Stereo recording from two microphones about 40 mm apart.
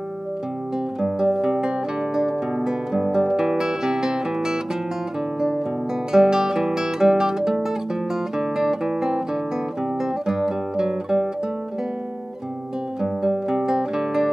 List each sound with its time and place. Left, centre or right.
1.0 s music: centre
6.1 s music: centre
10.2 s music: centre
13.0 s music: centre